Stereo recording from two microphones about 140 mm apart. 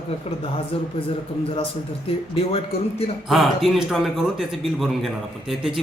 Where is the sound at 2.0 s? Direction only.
45° left (ahead or behind).